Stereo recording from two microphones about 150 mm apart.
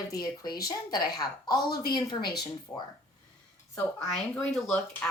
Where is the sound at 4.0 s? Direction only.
5° left (ahead or behind).